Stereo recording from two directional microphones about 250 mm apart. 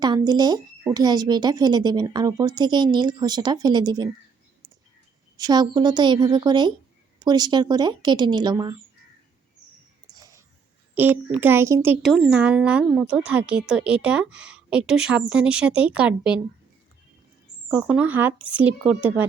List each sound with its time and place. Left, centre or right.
0.0 s speech: centre
5.4 s speech: centre
10.2 s a sound: centre
10.9 s a child's voice: centre
17.7 s a child's voice: centre